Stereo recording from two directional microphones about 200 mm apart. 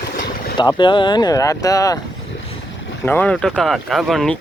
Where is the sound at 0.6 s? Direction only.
20° left (ahead or behind).